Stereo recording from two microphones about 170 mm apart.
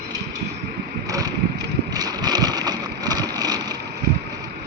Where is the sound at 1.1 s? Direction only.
20° right (ahead or behind).